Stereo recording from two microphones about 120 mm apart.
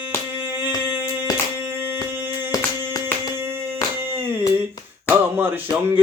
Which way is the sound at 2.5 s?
30° left (ahead or behind).